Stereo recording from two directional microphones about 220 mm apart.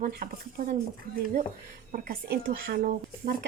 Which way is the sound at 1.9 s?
40° right (ahead or behind).